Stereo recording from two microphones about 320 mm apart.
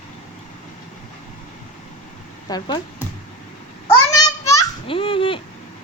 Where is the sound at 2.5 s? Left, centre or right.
Centre.